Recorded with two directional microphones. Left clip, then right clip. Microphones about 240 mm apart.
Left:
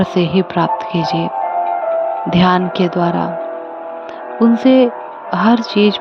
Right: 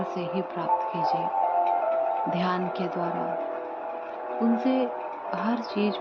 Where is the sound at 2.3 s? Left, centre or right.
Left.